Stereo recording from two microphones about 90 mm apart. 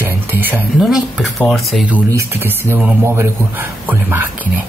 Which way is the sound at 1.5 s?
Centre (ahead or behind).